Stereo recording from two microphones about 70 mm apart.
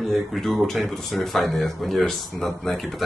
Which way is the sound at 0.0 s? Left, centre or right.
Centre.